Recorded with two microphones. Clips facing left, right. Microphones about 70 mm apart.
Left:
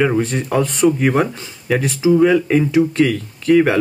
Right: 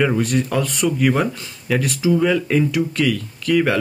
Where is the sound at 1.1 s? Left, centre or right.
Centre.